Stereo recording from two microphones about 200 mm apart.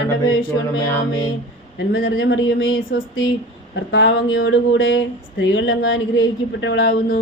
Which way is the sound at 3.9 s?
70° left (ahead or behind).